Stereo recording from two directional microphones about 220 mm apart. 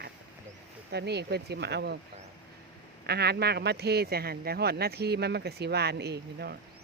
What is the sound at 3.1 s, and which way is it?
Speech, 45° right (ahead or behind).